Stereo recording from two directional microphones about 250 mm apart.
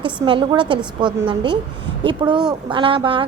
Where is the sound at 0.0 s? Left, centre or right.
Centre.